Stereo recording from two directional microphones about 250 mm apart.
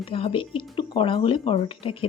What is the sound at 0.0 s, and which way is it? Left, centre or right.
Speech, left.